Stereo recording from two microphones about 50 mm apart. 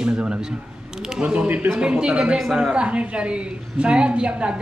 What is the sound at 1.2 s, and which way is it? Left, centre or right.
A woman's voice, right.